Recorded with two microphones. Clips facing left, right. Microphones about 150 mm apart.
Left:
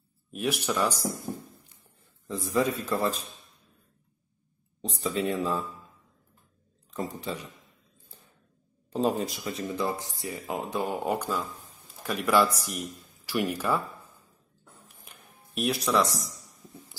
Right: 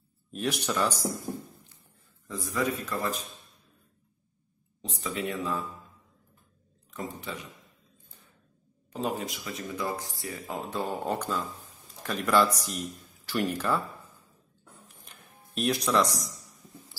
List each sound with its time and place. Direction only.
0.3 s speech: 5° left (ahead or behind)
2.2 s speech: 30° left (ahead or behind)
4.8 s speech: 30° left (ahead or behind)
6.9 s speech: 35° left (ahead or behind)
8.9 s speech: 35° left (ahead or behind)
10.1 s a man's voice: 20° left (ahead or behind)
15.0 s music: 5° left (ahead or behind)